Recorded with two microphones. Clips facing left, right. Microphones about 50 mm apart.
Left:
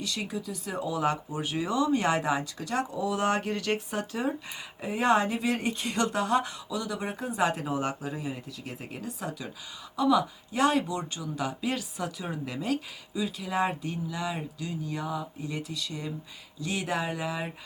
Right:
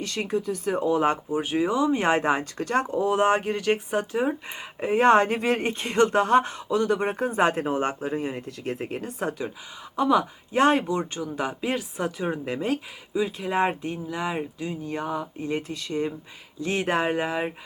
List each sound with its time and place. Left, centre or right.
0.0 s speech: right
4.8 s speech: right